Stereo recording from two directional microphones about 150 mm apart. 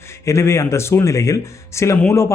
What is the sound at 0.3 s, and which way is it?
Speech, 20° left (ahead or behind).